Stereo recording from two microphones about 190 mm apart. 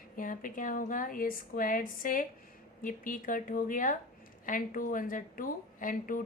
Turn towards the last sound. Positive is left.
turn(degrees=45)  # may be behind; listen again after turning